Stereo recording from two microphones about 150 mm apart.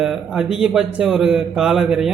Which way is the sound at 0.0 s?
Centre (ahead or behind).